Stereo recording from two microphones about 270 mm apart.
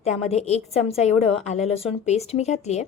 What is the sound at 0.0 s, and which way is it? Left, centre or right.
A woman's voice, left.